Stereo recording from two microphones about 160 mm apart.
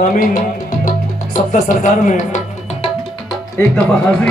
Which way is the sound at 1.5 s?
50° left (ahead or behind).